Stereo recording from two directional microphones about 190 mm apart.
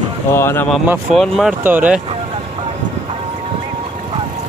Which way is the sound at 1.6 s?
10° right (ahead or behind).